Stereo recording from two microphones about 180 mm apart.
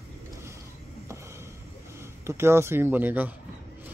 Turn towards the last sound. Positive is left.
turn(degrees=-10)  # may be behind; listen again after turning